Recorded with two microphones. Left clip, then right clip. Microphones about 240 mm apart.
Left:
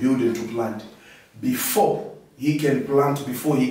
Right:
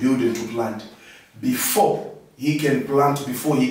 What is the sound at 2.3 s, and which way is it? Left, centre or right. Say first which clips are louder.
A man's voice: right 1 dB; centre.